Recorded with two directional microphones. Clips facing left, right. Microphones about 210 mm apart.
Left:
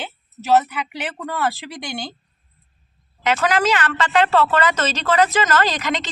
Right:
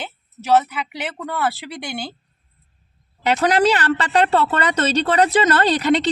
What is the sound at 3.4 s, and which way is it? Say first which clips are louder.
Speech: right 4 dB; 35° right (ahead or behind).